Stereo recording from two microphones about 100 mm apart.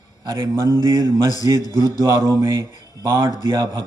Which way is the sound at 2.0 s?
35° right (ahead or behind).